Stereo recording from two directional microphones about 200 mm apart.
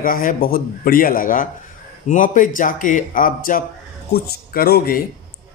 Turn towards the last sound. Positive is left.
turn(degrees=50)  # may be behind; listen again after turning